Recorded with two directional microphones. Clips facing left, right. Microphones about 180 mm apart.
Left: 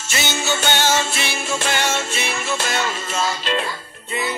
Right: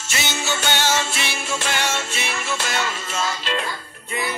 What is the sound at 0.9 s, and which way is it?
Music, 45° left (ahead or behind).